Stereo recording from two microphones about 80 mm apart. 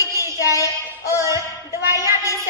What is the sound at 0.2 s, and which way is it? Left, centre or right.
Child singing, left.